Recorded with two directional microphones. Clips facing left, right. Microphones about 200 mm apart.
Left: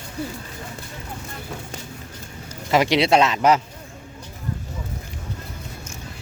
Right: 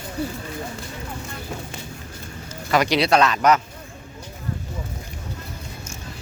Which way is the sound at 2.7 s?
25° left (ahead or behind).